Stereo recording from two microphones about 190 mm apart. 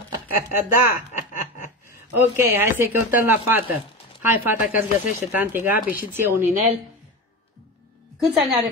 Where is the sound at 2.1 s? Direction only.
10° right (ahead or behind).